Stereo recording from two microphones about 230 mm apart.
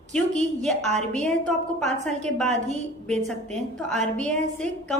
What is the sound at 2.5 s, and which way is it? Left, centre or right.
Speech, right.